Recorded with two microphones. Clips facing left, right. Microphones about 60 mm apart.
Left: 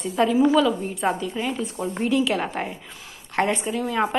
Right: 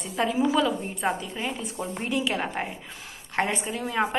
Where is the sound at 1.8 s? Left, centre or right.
Right.